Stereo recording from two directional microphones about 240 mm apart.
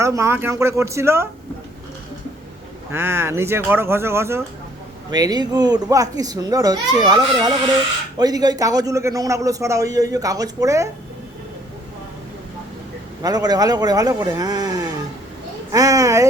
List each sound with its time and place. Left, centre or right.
0.0 s a man's voice: centre
2.9 s a man's voice: centre
13.2 s a man's voice: centre